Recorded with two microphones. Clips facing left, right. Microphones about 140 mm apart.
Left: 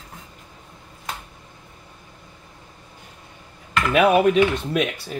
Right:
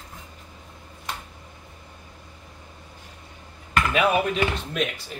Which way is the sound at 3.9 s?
60° left (ahead or behind).